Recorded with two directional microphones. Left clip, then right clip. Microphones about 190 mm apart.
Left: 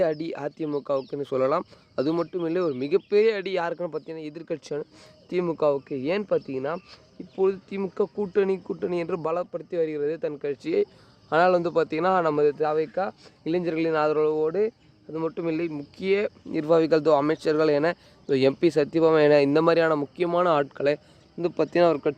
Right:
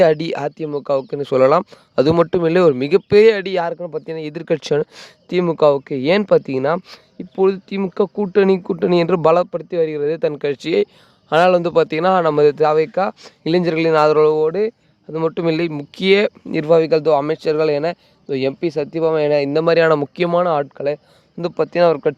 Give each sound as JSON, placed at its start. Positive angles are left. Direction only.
{"t": 0.0, "sound": "speech", "side_deg": -50}
{"t": 3.3, "sound": "speech", "side_deg": -35}
{"t": 4.0, "sound": "speech", "side_deg": -50}
{"t": 11.3, "sound": "speech", "side_deg": -40}
{"t": 16.6, "sound": "speech", "side_deg": -30}
{"t": 18.3, "sound": "speech", "side_deg": -10}
{"t": 19.5, "sound": "speech", "side_deg": -30}
{"t": 20.4, "sound": "speech", "side_deg": -25}